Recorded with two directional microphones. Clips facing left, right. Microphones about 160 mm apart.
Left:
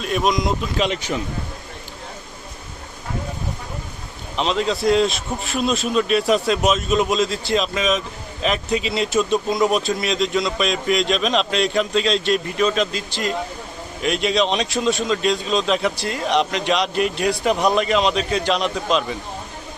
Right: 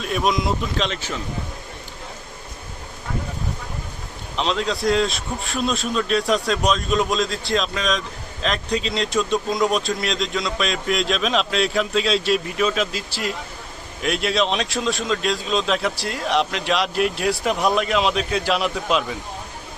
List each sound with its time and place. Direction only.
0.0 s a man's voice: centre (ahead or behind)
0.9 s speech: 15° left (ahead or behind)
4.4 s a man's voice: centre (ahead or behind)